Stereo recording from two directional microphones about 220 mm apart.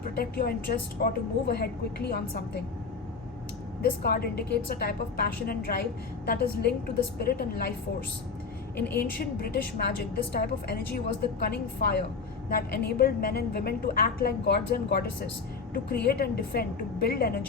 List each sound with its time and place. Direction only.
0.2 s a woman's voice: 45° left (ahead or behind)
3.8 s a woman's voice: 45° left (ahead or behind)
9.0 s a woman's voice: 45° left (ahead or behind)